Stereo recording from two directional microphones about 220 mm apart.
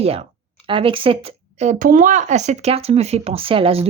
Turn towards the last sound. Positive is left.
turn(degrees=-25)  # may be behind; listen again after turning